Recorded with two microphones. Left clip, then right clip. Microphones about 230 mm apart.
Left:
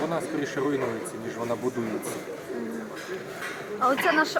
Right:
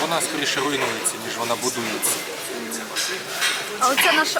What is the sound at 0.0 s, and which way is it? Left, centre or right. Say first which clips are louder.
Speech: right 6 dB; centre.